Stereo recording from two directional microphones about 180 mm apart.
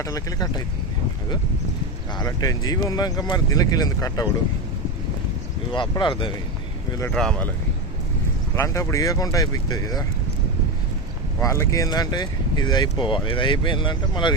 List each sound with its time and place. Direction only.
0.0 s speech: 20° left (ahead or behind)
2.1 s speech: 20° left (ahead or behind)
5.7 s speech: 25° left (ahead or behind)
7.1 s speech: 5° left (ahead or behind)
8.5 s speech: 15° left (ahead or behind)
11.3 s speech: 15° left (ahead or behind)